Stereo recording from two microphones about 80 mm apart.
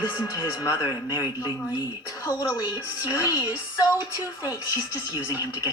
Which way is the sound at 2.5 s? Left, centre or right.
Left.